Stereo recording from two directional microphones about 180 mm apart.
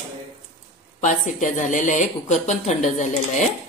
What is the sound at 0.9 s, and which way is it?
A woman's voice, 45° left (ahead or behind).